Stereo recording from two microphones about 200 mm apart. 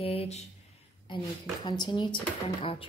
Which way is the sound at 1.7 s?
20° left (ahead or behind).